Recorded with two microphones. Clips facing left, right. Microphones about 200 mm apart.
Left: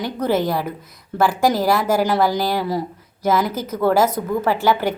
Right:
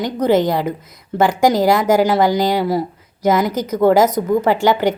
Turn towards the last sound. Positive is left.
turn(degrees=-15)  # may be behind; listen again after turning